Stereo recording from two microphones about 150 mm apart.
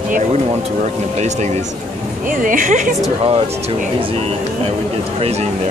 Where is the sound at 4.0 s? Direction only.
35° right (ahead or behind).